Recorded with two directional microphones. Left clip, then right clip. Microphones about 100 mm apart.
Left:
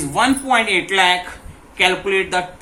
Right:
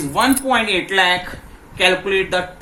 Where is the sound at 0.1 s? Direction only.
35° right (ahead or behind).